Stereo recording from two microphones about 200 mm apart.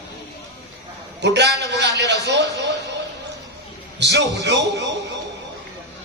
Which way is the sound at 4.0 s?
60° right (ahead or behind).